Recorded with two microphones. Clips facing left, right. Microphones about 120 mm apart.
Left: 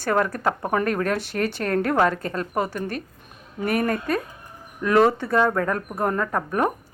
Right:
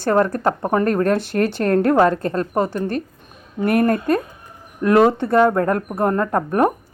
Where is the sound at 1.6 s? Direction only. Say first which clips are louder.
Right 6 dB; 45° right (ahead or behind).